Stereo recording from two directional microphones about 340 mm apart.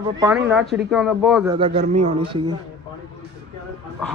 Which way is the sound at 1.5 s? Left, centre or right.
Centre.